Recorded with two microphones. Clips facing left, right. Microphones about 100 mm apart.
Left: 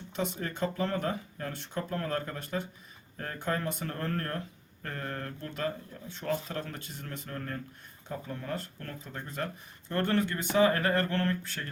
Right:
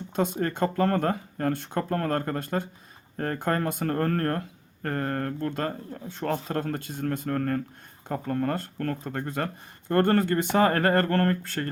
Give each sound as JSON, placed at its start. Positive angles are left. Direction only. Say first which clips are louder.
{"t": 0.2, "sound": "speech", "louder": "right 7 dB", "side_deg": -50}